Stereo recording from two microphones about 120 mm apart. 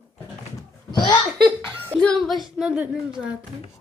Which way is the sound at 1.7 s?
15° right (ahead or behind).